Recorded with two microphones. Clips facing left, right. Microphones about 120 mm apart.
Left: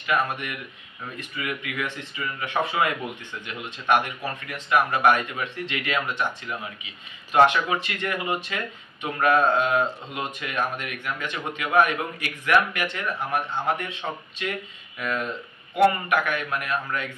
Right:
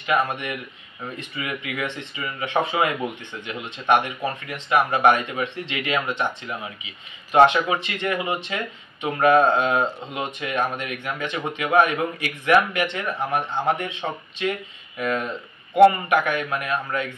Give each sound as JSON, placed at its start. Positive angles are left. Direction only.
{"t": 0.0, "sound": "speech", "side_deg": -20}
{"t": 15.7, "sound": "speech", "side_deg": -25}